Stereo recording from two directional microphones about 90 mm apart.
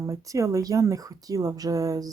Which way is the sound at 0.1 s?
35° right (ahead or behind).